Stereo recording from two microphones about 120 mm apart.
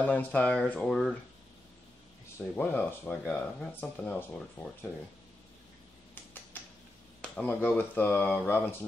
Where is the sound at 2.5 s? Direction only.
15° left (ahead or behind).